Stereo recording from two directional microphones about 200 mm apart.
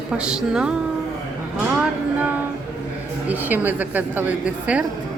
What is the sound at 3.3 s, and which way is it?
A woman's voice, 10° right (ahead or behind).